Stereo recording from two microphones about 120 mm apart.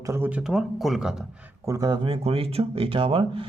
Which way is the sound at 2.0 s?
50° right (ahead or behind).